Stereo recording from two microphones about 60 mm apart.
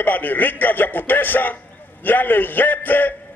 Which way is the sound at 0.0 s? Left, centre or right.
Left.